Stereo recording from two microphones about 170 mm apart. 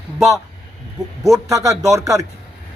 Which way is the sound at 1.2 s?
20° right (ahead or behind).